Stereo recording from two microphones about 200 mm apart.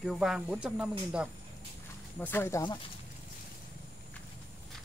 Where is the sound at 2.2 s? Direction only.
10° left (ahead or behind).